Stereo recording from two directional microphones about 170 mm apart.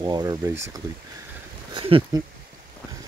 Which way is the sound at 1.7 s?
30° right (ahead or behind).